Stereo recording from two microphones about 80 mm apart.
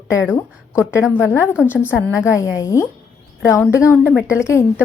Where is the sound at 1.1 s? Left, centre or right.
Left.